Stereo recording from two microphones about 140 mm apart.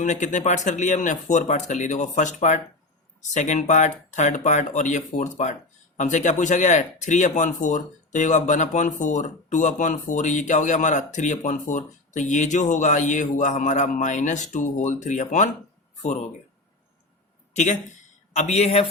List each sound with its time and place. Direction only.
0.0 s speech: 60° left (ahead or behind)
17.5 s speech: 60° left (ahead or behind)